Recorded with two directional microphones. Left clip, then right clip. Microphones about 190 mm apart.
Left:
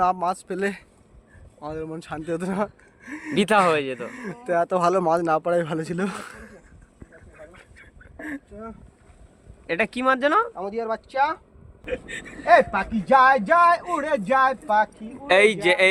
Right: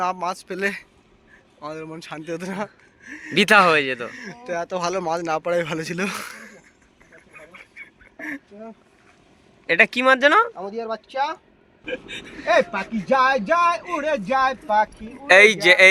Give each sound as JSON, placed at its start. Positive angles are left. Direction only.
{"t": 0.0, "sound": "a man's voice", "side_deg": 35}
{"t": 3.3, "sound": "speech", "side_deg": -5}
{"t": 4.1, "sound": "a man's voice", "side_deg": 60}
{"t": 7.3, "sound": "a sound", "side_deg": 25}
{"t": 9.6, "sound": "speech", "side_deg": -10}
{"t": 11.9, "sound": "speech", "side_deg": 25}
{"t": 13.1, "sound": "speech", "side_deg": -5}